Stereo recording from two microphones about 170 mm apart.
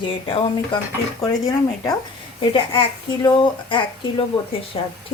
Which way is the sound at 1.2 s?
20° left (ahead or behind).